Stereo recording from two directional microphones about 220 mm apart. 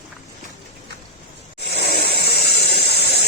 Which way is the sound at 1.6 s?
45° left (ahead or behind).